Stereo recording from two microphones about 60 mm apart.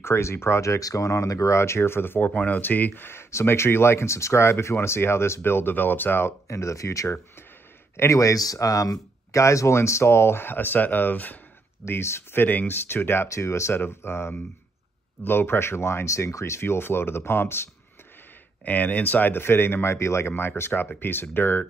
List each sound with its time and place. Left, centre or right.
0.0 s speech: left
6.4 s speech: left
11.9 s speech: left
13.3 s speech: left
18.7 s speech: left